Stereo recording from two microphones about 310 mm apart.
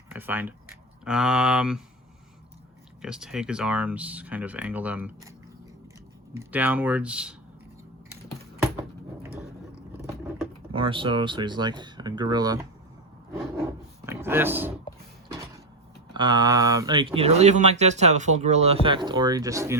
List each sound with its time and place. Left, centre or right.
0.1 s speech: centre
3.0 s speech: centre
6.3 s speech: centre
10.7 s speech: centre
16.1 s speech: centre